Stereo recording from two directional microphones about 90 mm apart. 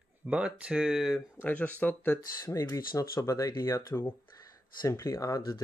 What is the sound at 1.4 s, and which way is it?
Speech, 20° left (ahead or behind).